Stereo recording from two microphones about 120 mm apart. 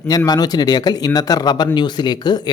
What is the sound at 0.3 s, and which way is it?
Speech, 35° left (ahead or behind).